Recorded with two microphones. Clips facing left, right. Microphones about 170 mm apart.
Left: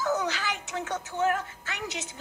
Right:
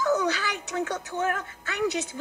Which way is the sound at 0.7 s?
55° right (ahead or behind).